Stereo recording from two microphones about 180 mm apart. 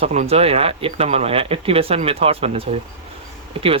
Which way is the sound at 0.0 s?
35° right (ahead or behind).